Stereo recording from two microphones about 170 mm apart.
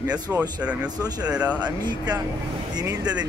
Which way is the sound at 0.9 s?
20° right (ahead or behind).